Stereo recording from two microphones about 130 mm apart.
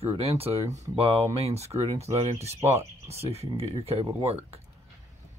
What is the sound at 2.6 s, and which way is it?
Speech, 20° right (ahead or behind).